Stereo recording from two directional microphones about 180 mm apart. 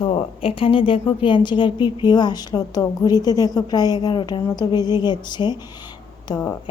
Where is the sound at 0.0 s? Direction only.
30° left (ahead or behind).